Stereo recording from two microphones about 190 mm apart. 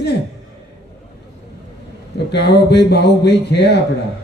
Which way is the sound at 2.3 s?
65° left (ahead or behind).